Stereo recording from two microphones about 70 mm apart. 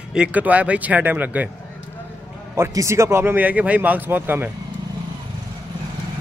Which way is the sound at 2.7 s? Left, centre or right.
Right.